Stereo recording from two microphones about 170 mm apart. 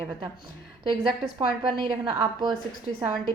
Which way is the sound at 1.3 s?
25° right (ahead or behind).